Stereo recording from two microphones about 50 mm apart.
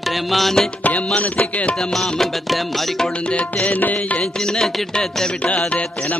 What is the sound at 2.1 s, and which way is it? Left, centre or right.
Music, centre.